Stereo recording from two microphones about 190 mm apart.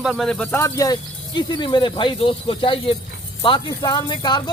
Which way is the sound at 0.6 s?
20° left (ahead or behind).